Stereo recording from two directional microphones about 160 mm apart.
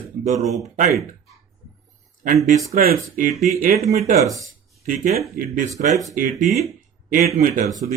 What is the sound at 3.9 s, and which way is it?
Speech, 45° right (ahead or behind).